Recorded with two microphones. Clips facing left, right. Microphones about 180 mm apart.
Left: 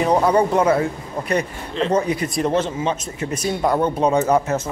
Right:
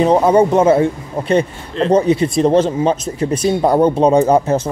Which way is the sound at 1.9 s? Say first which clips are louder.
Right 8 dB; 30° right (ahead or behind).